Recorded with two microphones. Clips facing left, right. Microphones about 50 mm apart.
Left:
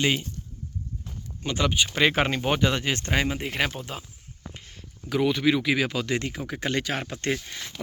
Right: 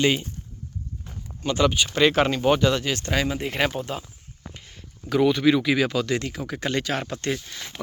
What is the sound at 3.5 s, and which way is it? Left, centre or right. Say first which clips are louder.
Speech: right 3 dB; centre.